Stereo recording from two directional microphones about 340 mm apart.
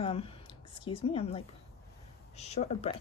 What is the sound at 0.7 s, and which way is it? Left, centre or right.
Speech, centre.